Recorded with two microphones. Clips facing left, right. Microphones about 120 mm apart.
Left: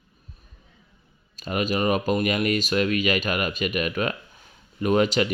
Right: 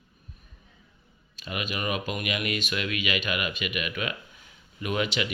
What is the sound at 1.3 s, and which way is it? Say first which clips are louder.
Speech: left 8 dB; 40° left (ahead or behind).